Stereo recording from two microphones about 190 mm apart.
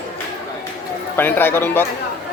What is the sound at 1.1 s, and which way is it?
Speech, 10° left (ahead or behind).